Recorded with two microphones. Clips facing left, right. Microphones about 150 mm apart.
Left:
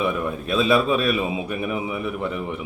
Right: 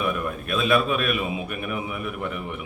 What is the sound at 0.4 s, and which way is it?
A man's voice, 30° left (ahead or behind).